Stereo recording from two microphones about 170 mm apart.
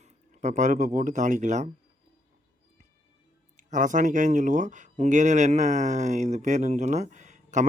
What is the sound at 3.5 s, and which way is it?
Speech, 50° right (ahead or behind).